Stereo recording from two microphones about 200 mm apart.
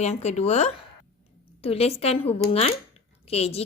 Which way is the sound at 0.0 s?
35° left (ahead or behind).